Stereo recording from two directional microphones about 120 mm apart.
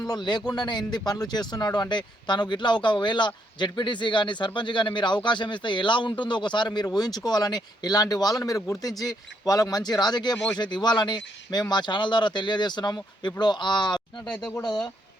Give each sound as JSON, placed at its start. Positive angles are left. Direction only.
{"t": 0.0, "sound": "speech", "side_deg": 35}